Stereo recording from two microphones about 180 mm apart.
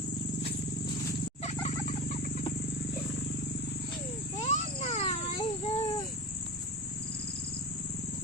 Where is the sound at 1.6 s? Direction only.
40° left (ahead or behind).